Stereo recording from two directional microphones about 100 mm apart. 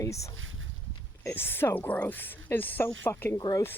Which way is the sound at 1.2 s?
20° left (ahead or behind).